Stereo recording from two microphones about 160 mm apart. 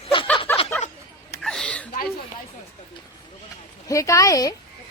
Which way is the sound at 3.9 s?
20° left (ahead or behind).